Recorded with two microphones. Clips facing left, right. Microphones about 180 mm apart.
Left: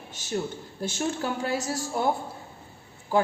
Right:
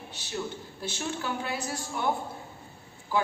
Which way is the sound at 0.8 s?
45° left (ahead or behind).